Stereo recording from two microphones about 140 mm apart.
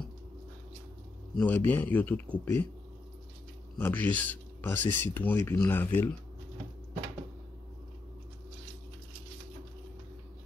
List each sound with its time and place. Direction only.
1.4 s speech: 10° left (ahead or behind)
3.7 s speech: 10° left (ahead or behind)